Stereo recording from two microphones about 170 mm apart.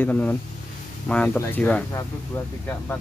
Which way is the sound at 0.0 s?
10° left (ahead or behind).